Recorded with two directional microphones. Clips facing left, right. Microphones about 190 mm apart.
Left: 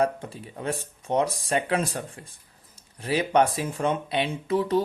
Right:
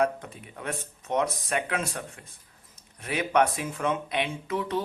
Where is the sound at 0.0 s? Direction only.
30° left (ahead or behind).